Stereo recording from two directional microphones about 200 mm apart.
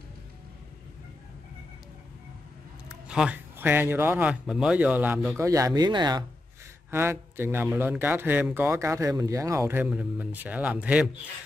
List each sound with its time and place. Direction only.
3.1 s a man's voice: 5° right (ahead or behind)